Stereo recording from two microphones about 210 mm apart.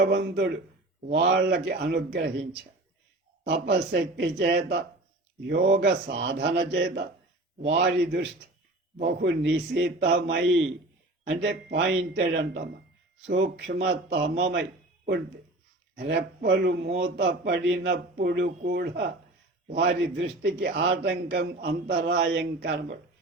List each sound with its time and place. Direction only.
0.0 s a man's voice: 55° right (ahead or behind)
5.8 s a man's voice: 55° right (ahead or behind)